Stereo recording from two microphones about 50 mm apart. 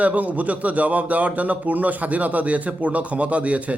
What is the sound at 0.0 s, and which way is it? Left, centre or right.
A man's voice, right.